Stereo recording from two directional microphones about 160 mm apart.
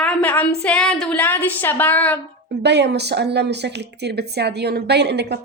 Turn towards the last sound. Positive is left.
turn(degrees=-90)